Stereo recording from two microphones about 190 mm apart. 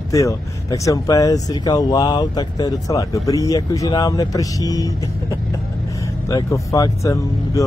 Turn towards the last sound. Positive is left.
turn(degrees=15)  # may be behind; listen again after turning